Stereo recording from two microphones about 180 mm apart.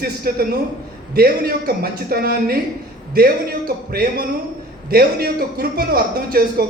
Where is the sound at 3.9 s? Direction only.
55° right (ahead or behind).